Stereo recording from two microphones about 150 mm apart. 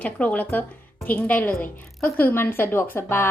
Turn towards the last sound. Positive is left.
turn(degrees=15)  # may be behind; listen again after turning